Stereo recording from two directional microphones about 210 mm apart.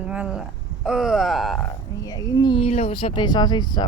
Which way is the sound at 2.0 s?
15° left (ahead or behind).